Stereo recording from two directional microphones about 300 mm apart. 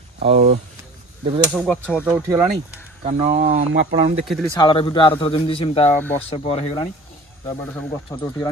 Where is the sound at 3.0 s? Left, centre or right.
Right.